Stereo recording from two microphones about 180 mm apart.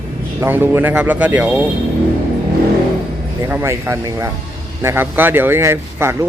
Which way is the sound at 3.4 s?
15° right (ahead or behind).